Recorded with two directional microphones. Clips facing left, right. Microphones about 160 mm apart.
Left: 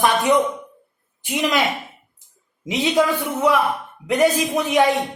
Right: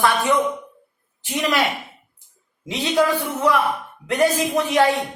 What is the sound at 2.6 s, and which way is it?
Speech, 15° left (ahead or behind).